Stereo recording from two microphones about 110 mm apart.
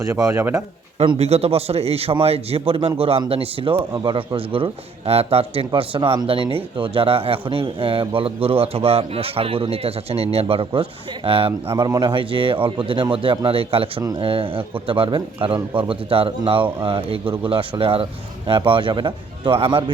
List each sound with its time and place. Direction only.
0.1 s speech: 25° right (ahead or behind)
1.2 s a man's voice: 70° right (ahead or behind)
3.9 s a man's voice: 45° right (ahead or behind)
11.9 s a man's voice: 45° right (ahead or behind)